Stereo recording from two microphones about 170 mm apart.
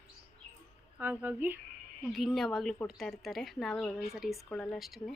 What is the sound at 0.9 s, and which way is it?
Speech, 10° right (ahead or behind).